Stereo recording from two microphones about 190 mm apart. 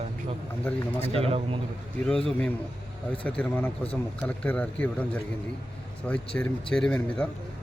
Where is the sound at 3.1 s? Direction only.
10° left (ahead or behind).